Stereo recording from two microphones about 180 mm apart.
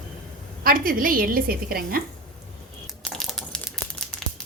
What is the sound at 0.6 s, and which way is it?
A woman's voice, 50° right (ahead or behind).